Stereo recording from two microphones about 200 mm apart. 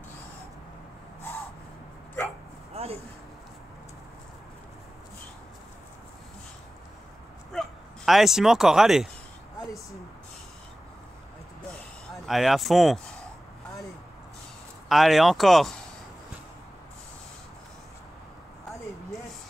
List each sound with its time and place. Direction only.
2.7 s a sound: 30° right (ahead or behind)
7.5 s speech: centre (ahead or behind)
12.3 s speech: centre (ahead or behind)
14.9 s speech: centre (ahead or behind)